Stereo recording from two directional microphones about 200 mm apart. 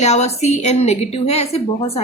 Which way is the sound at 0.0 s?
35° left (ahead or behind).